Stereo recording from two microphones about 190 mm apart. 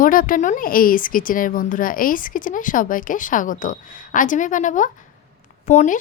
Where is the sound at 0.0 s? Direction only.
45° left (ahead or behind).